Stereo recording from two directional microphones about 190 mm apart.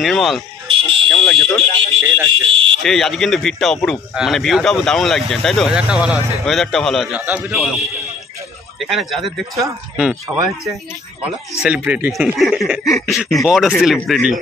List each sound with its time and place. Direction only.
0.0 s speech: centre (ahead or behind)
0.7 s fire alarm: 25° right (ahead or behind)
1.0 s speech: 5° left (ahead or behind)
1.6 s speech: 30° right (ahead or behind)
2.5 s fire alarm: 30° right (ahead or behind)
2.8 s speech: centre (ahead or behind)
8.7 s speech: centre (ahead or behind)
10.3 s speech: 15° right (ahead or behind); by 14.2 s centre (ahead or behind)